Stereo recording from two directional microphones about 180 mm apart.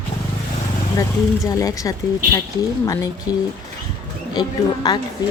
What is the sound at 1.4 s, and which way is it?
Speech, 20° left (ahead or behind).